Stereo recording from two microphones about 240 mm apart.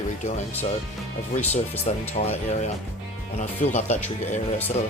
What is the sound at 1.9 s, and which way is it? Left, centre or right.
Speech, left.